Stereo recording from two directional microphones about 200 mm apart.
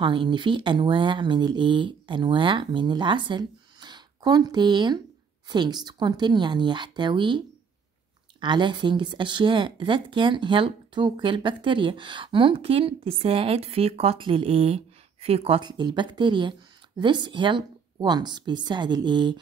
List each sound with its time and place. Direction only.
0.0 s speech: 25° right (ahead or behind)